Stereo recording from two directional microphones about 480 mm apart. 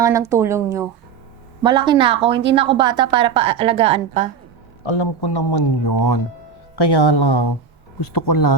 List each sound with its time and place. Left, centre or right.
0.0 s a woman's voice: centre
4.9 s speech: left
8.1 s speech: left